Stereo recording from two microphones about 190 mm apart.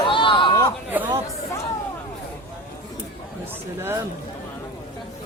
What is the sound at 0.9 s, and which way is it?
Chatter, 10° right (ahead or behind).